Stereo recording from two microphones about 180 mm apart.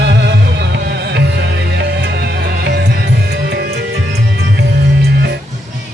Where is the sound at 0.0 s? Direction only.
65° right (ahead or behind).